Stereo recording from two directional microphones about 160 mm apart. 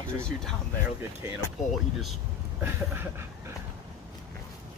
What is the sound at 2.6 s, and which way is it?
Speech, 15° right (ahead or behind).